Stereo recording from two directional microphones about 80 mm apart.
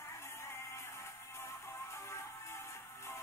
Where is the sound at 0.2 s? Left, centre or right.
Left.